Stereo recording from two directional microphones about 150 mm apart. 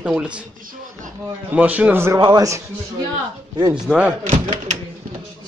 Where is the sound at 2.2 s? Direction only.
25° right (ahead or behind).